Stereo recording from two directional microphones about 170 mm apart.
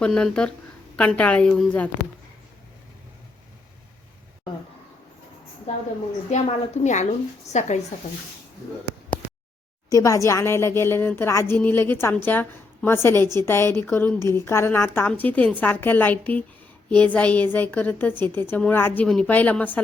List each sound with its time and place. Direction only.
0.0 s speech: 5° left (ahead or behind)
5.7 s speech: 45° left (ahead or behind)
9.9 s speech: 20° left (ahead or behind)